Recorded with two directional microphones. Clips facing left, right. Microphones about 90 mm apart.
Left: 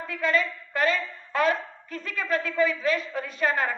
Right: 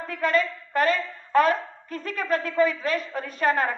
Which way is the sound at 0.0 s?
45° right (ahead or behind).